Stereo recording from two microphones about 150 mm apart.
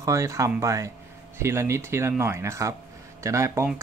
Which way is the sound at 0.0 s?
20° right (ahead or behind).